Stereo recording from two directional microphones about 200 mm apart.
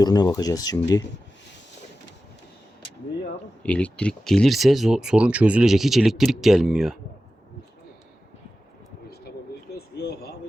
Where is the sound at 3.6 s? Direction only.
5° left (ahead or behind).